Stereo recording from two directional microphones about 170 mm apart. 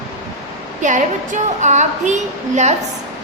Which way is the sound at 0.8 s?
45° right (ahead or behind).